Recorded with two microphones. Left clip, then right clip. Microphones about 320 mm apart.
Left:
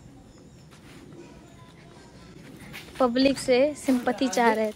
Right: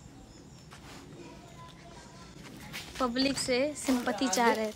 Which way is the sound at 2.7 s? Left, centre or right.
Centre.